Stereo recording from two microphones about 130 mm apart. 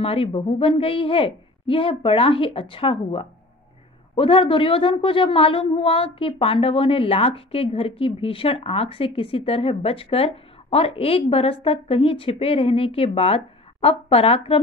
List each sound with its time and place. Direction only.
0.0 s a woman's voice: 45° left (ahead or behind)